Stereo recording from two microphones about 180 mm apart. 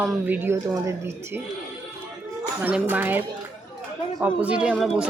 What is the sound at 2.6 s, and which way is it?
Speech, 10° right (ahead or behind).